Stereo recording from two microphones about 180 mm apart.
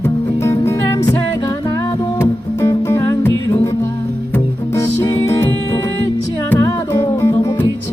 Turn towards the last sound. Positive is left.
turn(degrees=15)  # may be behind; listen again after turning